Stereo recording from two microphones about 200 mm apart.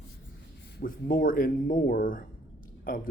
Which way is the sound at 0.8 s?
45° left (ahead or behind).